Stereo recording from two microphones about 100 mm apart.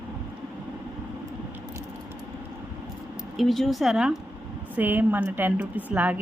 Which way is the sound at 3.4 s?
Centre (ahead or behind).